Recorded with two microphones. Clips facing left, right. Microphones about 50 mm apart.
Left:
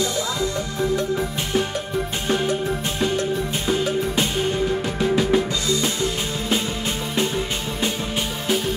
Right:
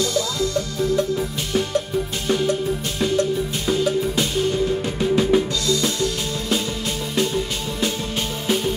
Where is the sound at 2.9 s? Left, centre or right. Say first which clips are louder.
Right 3 dB; left.